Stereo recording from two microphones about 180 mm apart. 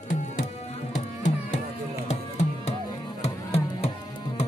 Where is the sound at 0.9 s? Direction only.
45° left (ahead or behind).